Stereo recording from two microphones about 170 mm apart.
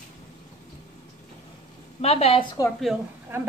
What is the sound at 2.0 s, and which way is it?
Speech, 35° left (ahead or behind).